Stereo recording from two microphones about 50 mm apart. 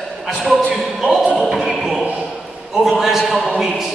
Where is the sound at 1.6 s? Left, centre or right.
Centre.